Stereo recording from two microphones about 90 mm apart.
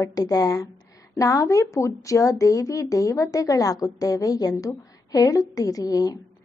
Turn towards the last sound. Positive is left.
turn(degrees=40)  # may be behind; listen again after turning